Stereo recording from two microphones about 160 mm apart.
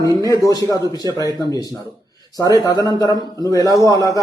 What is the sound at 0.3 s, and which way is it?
Speech, 20° left (ahead or behind).